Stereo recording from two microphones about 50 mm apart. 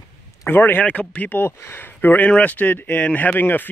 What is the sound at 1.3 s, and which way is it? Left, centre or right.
Speech, left.